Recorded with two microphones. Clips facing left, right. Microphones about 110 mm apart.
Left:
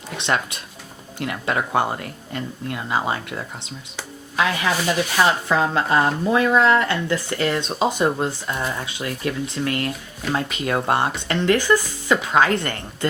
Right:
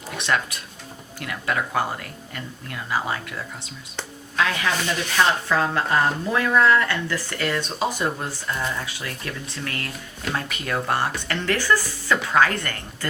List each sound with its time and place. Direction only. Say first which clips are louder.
0.2 s speech: left 1 dB; 25° left (ahead or behind)